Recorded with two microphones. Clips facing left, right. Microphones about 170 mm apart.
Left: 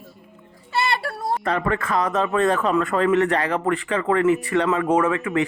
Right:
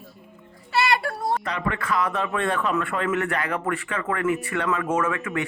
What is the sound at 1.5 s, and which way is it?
Speech, 40° left (ahead or behind).